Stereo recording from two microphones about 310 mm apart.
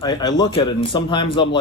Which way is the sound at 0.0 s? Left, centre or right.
Centre.